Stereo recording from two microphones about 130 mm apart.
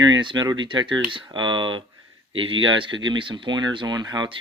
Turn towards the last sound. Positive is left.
turn(degrees=-35)  # may be behind; listen again after turning